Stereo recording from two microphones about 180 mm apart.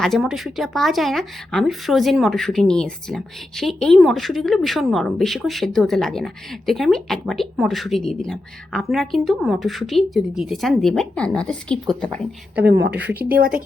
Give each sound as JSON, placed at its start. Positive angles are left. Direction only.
{"t": 0.0, "sound": "speech", "side_deg": 0}
{"t": 12.6, "sound": "a woman's voice", "side_deg": -80}